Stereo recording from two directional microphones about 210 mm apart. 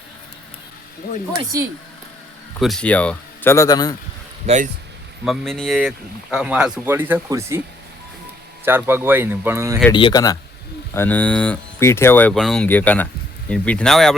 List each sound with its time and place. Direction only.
2.6 s speech: centre (ahead or behind); by 3.9 s 20° left (ahead or behind)
4.4 s speech: 35° right (ahead or behind)
5.2 s speech: centre (ahead or behind)
8.6 s speech: 10° right (ahead or behind)
9.9 s speech: 20° left (ahead or behind); by 14.2 s centre (ahead or behind)